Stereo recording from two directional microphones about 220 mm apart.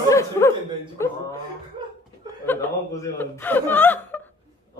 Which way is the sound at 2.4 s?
10° left (ahead or behind).